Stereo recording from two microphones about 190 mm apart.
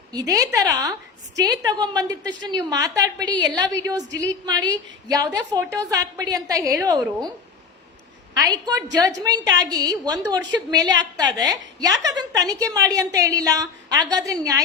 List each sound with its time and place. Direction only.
0.1 s a woman's voice: 20° right (ahead or behind)
8.3 s a woman's voice: 20° right (ahead or behind)